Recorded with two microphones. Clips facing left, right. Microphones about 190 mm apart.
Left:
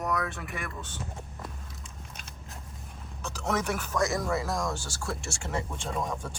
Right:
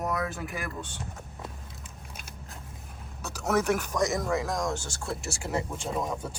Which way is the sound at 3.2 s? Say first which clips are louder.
Right 3 dB; 5° right (ahead or behind).